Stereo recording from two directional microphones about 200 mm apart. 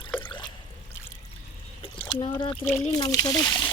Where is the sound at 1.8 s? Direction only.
25° left (ahead or behind).